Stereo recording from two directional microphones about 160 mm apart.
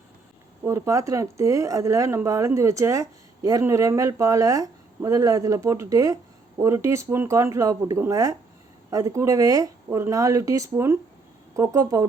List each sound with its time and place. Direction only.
0.6 s speech: 20° right (ahead or behind)